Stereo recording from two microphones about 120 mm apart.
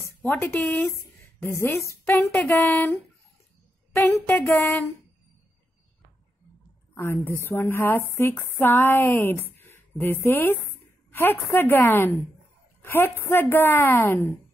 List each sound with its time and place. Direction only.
0.2 s speech: 20° left (ahead or behind)
7.0 s a woman's voice: 20° left (ahead or behind)